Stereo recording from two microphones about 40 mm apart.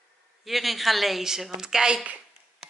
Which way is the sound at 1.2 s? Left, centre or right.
Centre.